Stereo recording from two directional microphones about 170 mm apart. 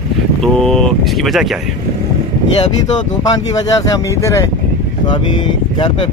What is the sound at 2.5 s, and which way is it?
Speech, 25° left (ahead or behind).